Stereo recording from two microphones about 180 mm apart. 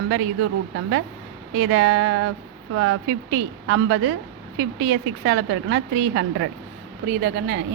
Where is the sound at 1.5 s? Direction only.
85° right.